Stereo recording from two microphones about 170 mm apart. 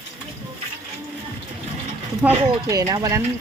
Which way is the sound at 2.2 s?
20° right (ahead or behind).